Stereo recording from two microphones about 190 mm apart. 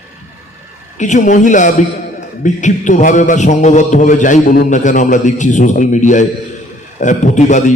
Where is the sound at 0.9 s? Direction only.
40° left (ahead or behind).